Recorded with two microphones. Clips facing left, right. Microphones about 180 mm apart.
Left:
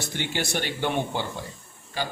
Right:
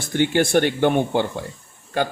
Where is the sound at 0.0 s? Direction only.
50° right (ahead or behind).